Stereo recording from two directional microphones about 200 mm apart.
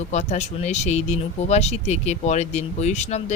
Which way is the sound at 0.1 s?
35° left (ahead or behind).